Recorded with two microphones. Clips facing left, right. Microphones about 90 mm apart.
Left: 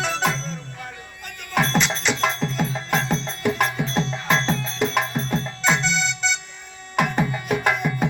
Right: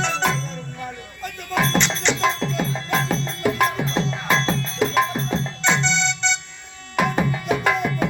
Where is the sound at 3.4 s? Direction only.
50° right (ahead or behind).